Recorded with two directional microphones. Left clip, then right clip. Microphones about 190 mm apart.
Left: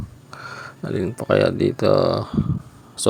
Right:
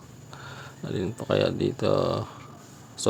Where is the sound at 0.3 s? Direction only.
25° left (ahead or behind).